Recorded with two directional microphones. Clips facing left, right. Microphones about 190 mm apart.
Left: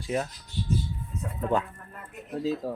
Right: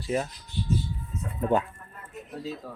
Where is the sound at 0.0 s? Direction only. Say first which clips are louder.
Right 1 dB; centre (ahead or behind).